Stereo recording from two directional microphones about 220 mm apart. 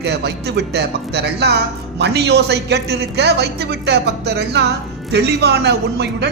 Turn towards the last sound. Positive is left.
turn(degrees=-50)  # may be behind; listen again after turning